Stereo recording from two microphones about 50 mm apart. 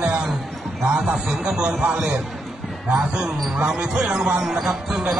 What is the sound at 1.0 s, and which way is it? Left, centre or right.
Speech, centre.